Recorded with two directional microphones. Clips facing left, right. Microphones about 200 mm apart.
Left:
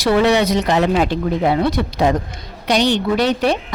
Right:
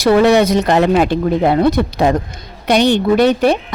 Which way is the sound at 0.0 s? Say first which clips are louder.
Right 4 dB; 45° right (ahead or behind).